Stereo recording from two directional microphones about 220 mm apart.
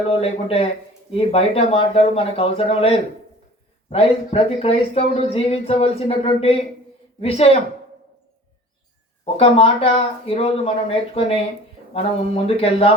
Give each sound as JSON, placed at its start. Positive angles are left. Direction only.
{"t": 0.1, "sound": "speech", "side_deg": 25}
{"t": 9.2, "sound": "speech", "side_deg": 25}